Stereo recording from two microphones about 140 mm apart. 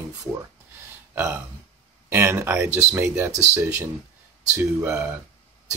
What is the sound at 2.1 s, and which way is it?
Speech, 15° right (ahead or behind).